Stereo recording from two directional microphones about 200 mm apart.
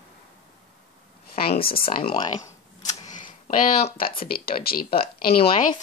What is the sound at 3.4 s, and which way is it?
Speech, 45° left (ahead or behind).